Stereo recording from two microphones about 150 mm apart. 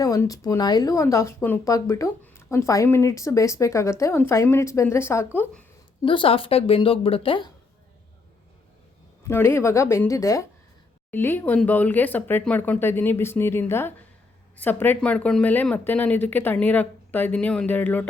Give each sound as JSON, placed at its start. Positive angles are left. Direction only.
{"t": 0.0, "sound": "speech", "side_deg": 25}
{"t": 6.0, "sound": "a woman's voice", "side_deg": 35}
{"t": 9.2, "sound": "speech", "side_deg": 15}